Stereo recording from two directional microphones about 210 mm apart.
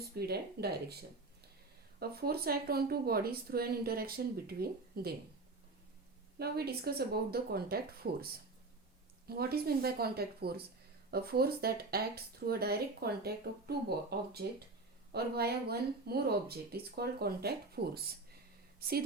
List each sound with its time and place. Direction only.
0.2 s speech: 50° right (ahead or behind)
2.0 s speech: 45° right (ahead or behind)
6.4 s speech: 50° right (ahead or behind)